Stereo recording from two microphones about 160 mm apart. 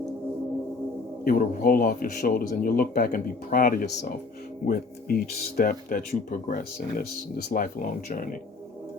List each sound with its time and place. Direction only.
1.2 s speech: 65° left (ahead or behind)